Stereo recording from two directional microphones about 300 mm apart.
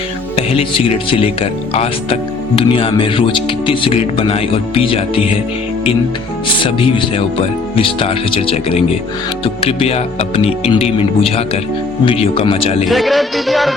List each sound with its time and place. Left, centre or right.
0.3 s speech: centre
6.6 s speech: centre
12.9 s music: centre